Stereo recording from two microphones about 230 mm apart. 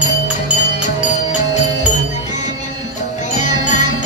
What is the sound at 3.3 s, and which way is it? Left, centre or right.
Music, left.